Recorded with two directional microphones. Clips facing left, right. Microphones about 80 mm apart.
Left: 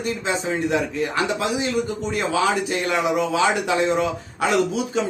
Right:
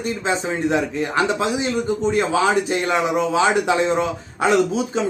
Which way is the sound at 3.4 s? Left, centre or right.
Right.